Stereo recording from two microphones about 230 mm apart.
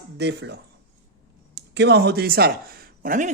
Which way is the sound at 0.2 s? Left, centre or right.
Right.